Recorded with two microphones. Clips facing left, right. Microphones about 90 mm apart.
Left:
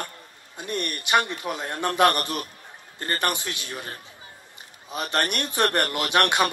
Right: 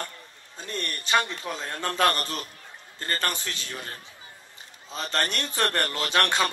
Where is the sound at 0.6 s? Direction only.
15° left (ahead or behind).